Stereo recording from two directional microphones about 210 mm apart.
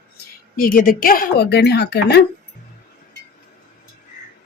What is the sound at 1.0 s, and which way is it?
A woman's voice, 40° left (ahead or behind).